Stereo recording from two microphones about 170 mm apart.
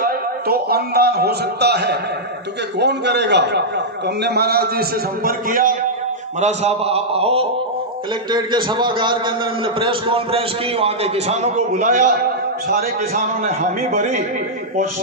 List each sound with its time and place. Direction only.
0.0 s a man's voice: 65° right (ahead or behind)
2.7 s a man's voice: 90° right
4.0 s a man's voice: 75° right (ahead or behind); by 5.7 s 55° right (ahead or behind)
6.4 s a man's voice: 40° right (ahead or behind)